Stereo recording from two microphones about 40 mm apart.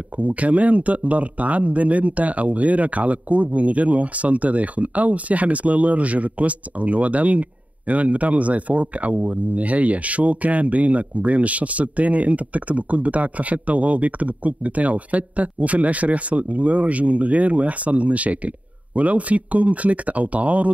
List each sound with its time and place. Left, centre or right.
0.2 s a man's voice: right